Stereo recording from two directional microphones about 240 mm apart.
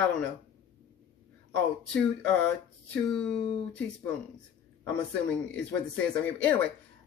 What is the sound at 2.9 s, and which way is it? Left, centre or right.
Speech, centre.